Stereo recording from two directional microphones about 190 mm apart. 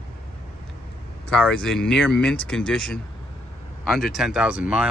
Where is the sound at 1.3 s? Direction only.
5° left (ahead or behind).